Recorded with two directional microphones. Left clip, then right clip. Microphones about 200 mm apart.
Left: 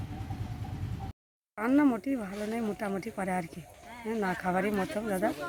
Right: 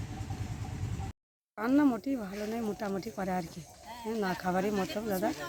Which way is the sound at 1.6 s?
5° left (ahead or behind).